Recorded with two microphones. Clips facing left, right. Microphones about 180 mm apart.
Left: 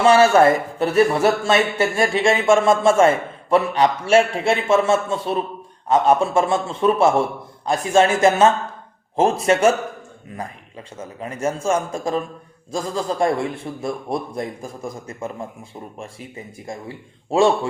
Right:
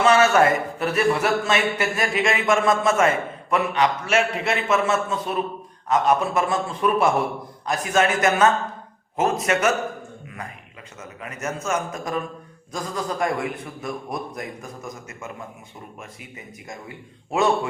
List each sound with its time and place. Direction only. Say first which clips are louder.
0.0 s speech: left 4 dB; 30° left (ahead or behind)